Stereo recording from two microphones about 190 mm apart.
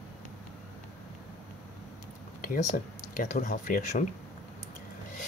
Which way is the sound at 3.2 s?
45° left (ahead or behind).